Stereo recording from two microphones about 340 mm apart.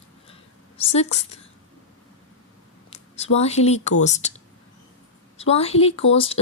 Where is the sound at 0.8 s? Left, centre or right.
Centre.